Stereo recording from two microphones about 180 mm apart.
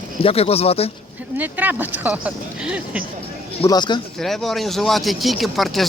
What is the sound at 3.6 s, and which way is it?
Speech, 25° left (ahead or behind).